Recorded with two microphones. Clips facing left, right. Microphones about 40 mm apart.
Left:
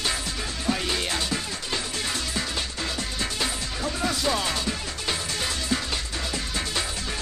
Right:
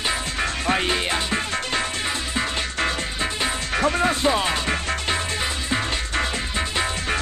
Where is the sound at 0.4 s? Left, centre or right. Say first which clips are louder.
Right 9 dB; right.